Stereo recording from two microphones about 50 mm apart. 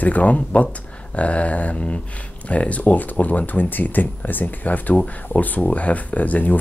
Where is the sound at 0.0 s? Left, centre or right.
Left.